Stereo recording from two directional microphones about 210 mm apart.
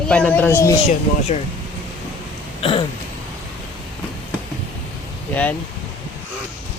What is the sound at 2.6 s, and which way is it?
Throat clearing, 25° left (ahead or behind).